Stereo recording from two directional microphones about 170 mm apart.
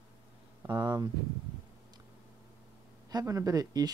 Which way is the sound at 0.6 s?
20° right (ahead or behind).